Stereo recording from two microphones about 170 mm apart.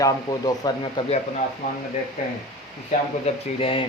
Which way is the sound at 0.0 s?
20° left (ahead or behind).